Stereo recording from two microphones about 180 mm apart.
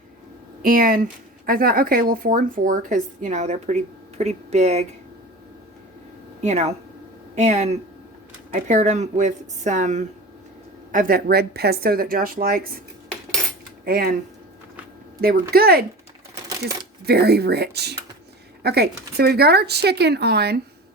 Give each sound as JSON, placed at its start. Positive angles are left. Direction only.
{"t": 0.6, "sound": "speech", "side_deg": -50}
{"t": 6.4, "sound": "speech", "side_deg": -35}
{"t": 13.8, "sound": "speech", "side_deg": -55}
{"t": 15.2, "sound": "speech", "side_deg": -60}
{"t": 17.1, "sound": "speech", "side_deg": -65}